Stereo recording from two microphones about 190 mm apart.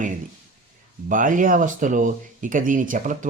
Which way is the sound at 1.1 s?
45° right (ahead or behind).